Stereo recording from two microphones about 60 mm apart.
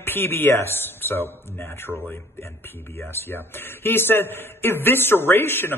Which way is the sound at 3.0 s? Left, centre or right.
Left.